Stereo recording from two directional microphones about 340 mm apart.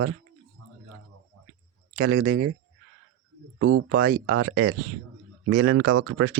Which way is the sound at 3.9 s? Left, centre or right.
Right.